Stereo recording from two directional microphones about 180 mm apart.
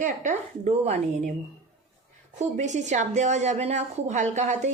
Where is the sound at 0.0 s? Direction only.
45° right (ahead or behind).